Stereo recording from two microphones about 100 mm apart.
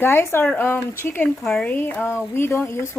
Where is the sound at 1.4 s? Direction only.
10° left (ahead or behind).